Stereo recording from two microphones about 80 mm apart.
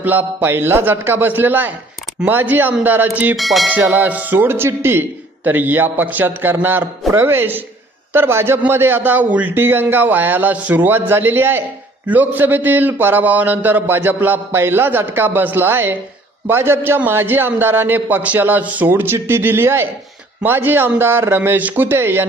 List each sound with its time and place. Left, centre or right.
0.0 s a man's voice: right
3.3 s bell: centre
3.7 s a man's voice: right